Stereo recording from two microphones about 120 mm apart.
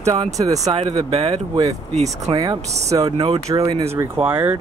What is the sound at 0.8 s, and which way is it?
Speech, 50° right (ahead or behind).